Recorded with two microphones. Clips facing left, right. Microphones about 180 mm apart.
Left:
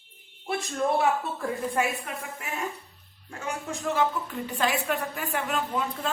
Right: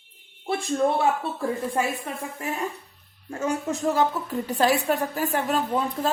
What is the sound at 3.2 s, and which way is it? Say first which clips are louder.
A woman's voice: right 7 dB; 40° right (ahead or behind).